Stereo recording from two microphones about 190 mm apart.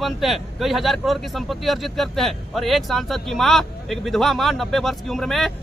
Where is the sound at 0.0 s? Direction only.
Centre (ahead or behind).